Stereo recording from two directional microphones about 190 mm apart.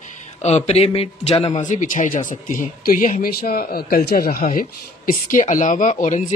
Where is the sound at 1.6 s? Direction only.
40° left (ahead or behind).